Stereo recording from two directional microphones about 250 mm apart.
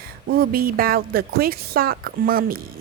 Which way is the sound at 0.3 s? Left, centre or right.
Right.